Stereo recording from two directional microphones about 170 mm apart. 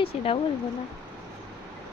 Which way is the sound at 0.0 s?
35° left (ahead or behind).